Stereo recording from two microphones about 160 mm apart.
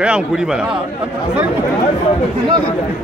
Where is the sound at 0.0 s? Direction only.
5° right (ahead or behind).